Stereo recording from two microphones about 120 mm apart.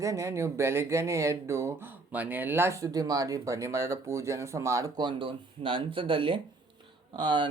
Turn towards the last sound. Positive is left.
turn(degrees=-40)  # may be behind; listen again after turning